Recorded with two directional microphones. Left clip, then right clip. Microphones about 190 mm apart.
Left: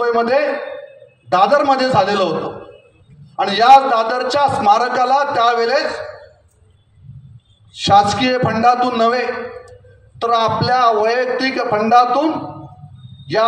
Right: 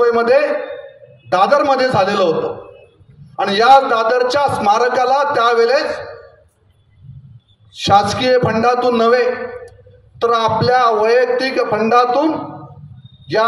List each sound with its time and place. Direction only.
0.0 s a man's voice: 20° right (ahead or behind)
7.7 s a man's voice: 20° right (ahead or behind)